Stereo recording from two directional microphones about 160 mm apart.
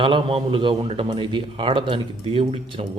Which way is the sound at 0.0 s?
35° right (ahead or behind).